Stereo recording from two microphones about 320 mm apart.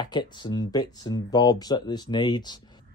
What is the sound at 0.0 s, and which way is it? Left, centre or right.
Speech, centre.